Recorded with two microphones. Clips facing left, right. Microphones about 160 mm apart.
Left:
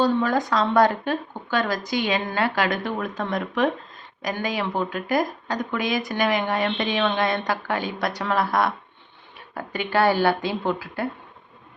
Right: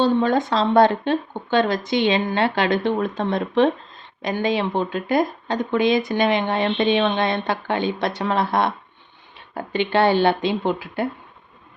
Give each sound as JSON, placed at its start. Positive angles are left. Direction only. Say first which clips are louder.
{"t": 0.0, "sound": "speech", "louder": "right 3 dB", "side_deg": -25}